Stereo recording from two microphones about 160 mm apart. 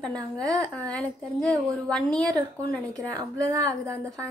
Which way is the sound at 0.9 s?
5° left (ahead or behind).